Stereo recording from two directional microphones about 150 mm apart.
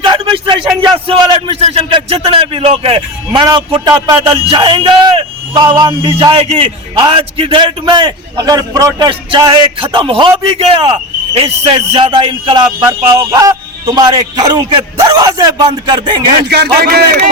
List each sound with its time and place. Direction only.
0.0 s a sound: 30° right (ahead or behind)
0.8 s a man's voice: 35° right (ahead or behind)
3.8 s a man's voice: 25° right (ahead or behind)
12.9 s a man's voice: 20° right (ahead or behind)
16.5 s a man's voice: 90° right